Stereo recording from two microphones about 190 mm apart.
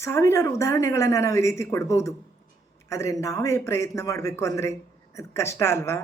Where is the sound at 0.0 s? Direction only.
15° left (ahead or behind).